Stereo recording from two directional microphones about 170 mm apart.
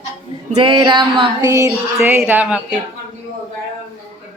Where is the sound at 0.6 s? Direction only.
25° right (ahead or behind).